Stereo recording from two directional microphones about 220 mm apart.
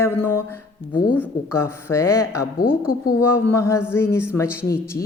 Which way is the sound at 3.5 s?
15° left (ahead or behind).